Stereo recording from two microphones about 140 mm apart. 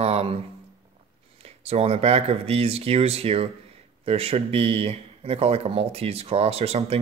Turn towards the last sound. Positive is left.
turn(degrees=-45)  # may be behind; listen again after turning